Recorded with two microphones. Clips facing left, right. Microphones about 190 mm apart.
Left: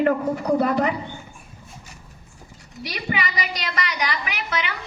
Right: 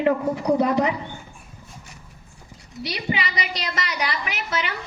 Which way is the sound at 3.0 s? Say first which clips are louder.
Left 1 dB; 25° right (ahead or behind).